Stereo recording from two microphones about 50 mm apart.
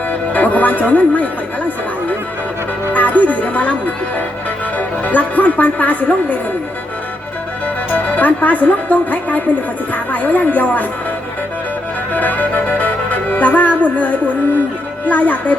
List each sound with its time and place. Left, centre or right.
0.1 s music: left
0.9 s speech: left
2.9 s speech: left
4.8 s speech: left
7.9 s speech: left
12.1 s music: left
15.0 s speech: left